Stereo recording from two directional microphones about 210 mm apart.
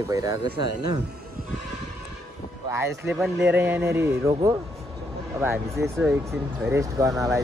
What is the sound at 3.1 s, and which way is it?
A man's voice, 5° right (ahead or behind).